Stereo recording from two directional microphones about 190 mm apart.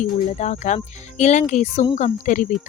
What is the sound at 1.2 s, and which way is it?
Speech, 35° left (ahead or behind).